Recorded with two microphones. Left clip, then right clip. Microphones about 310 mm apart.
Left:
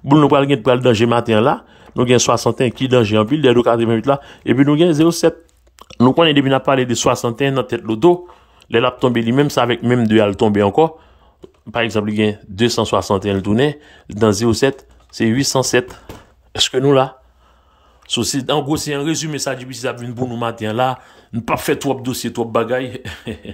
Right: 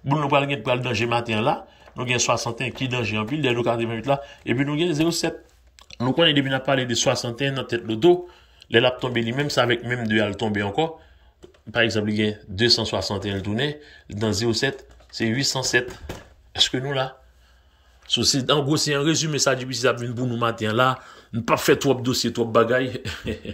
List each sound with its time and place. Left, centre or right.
0.1 s speech: centre